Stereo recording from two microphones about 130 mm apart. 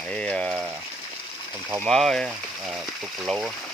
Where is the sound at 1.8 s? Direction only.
Centre (ahead or behind).